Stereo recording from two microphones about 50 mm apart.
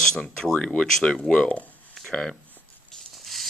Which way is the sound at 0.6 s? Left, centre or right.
Left.